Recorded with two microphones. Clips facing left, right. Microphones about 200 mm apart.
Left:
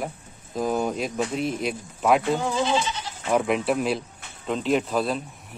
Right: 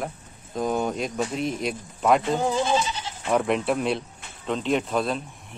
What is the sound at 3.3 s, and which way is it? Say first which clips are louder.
Speech: even; 5° left (ahead or behind).